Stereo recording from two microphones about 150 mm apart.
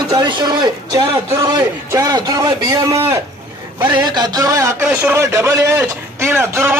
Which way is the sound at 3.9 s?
30° right (ahead or behind).